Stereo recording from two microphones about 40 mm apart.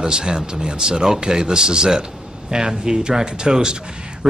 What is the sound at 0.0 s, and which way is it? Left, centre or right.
Speech, centre.